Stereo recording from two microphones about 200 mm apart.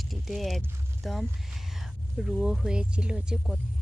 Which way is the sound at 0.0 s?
Centre (ahead or behind).